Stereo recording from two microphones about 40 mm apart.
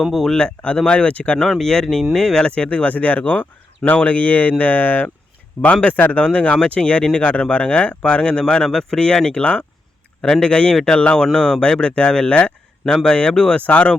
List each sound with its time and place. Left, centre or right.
0.0 s speech: centre
0.9 s speech: left
1.4 s speech: centre
2.6 s speech: left
6.2 s speech: left
7.0 s speech: centre
7.5 s a man's voice: left; by 10.5 s centre
10.5 s speech: left
10.8 s speech: centre
13.7 s speech: left